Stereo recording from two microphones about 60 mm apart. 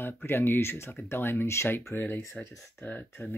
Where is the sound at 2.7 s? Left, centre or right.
Left.